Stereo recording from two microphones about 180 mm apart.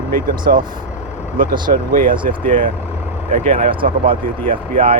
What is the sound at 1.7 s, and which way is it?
Speech, 50° right (ahead or behind).